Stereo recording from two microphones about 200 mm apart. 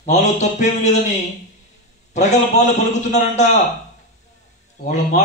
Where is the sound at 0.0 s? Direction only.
35° left (ahead or behind).